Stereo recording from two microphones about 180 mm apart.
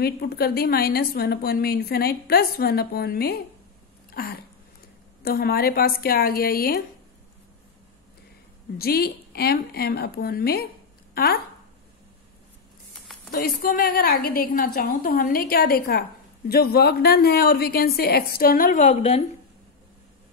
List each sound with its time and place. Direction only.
0.0 s a woman's voice: 60° left (ahead or behind)
4.1 s a sound: 55° left (ahead or behind)
5.2 s a woman's voice: 60° left (ahead or behind)
8.7 s a woman's voice: 60° left (ahead or behind)
13.3 s a woman's voice: 55° left (ahead or behind); by 19.2 s 40° left (ahead or behind)